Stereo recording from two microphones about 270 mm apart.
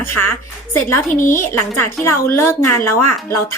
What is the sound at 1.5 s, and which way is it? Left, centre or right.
A woman's voice, centre.